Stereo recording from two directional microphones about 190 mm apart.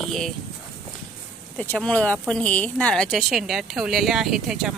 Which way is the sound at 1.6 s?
5° left (ahead or behind).